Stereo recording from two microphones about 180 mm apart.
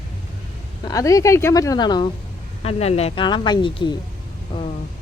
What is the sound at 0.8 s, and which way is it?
Speech, 20° left (ahead or behind).